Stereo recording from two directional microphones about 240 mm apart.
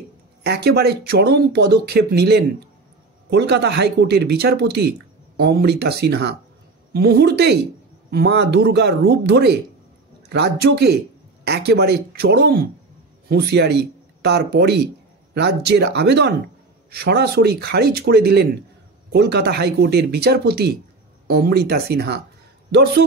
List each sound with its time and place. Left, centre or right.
0.4 s speech: right